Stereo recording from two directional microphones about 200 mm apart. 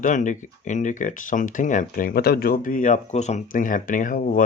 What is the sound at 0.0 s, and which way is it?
Speech, 40° left (ahead or behind).